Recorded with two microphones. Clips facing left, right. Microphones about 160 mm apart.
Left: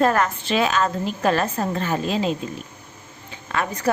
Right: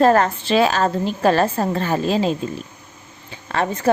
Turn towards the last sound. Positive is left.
turn(degrees=-30)  # may be behind; listen again after turning